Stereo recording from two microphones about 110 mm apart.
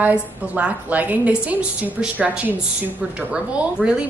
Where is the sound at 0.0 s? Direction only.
10° right (ahead or behind).